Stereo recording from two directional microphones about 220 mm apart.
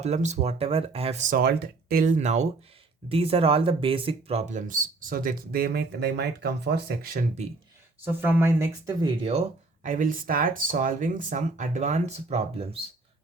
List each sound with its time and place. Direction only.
0.0 s speech: 30° right (ahead or behind)
8.0 s speech: 10° right (ahead or behind)
9.8 s speech: 40° right (ahead or behind)